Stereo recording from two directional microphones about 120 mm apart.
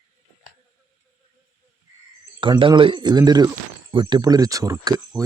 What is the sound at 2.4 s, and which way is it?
Speech, 45° right (ahead or behind).